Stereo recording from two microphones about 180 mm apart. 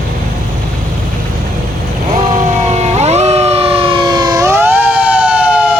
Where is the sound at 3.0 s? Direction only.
35° right (ahead or behind).